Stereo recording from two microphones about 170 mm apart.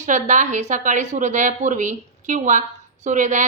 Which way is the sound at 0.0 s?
45° right (ahead or behind).